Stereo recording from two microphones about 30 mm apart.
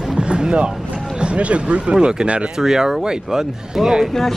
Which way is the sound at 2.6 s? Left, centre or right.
Centre.